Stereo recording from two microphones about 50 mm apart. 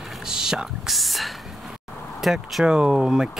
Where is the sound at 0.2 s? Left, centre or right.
Centre.